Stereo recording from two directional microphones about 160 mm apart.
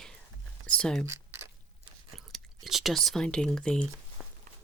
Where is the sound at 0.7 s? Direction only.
5° left (ahead or behind).